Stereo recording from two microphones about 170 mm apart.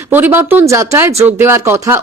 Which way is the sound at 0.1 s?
15° right (ahead or behind).